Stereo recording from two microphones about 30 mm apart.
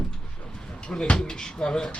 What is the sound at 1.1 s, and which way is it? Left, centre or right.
Speech, left.